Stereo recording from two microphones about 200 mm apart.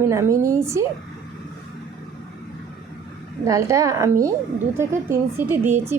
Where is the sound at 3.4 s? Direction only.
15° right (ahead or behind).